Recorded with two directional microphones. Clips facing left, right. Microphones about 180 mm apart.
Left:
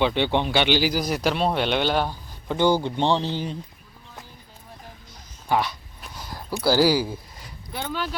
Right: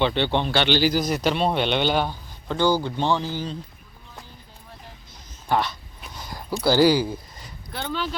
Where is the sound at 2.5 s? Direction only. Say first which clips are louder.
Left 1 dB; 20° left (ahead or behind).